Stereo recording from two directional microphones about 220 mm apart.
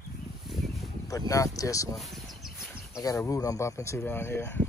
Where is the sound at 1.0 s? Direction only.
15° left (ahead or behind).